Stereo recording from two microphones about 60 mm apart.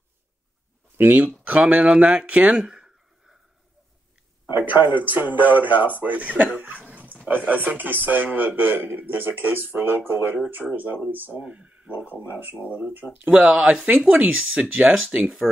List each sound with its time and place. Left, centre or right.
0.9 s speech: right; by 3.3 s centre
4.5 s a man's voice: right
6.9 s dog: right
7.4 s a man's voice: right
11.4 s speech: centre
13.0 s speech: left
13.8 s a man's voice: right